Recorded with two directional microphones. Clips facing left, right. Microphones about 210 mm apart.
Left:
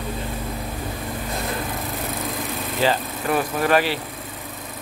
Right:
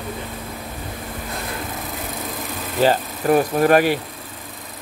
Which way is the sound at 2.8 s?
45° right (ahead or behind).